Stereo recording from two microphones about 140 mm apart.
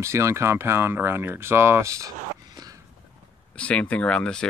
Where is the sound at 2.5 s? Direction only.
25° right (ahead or behind).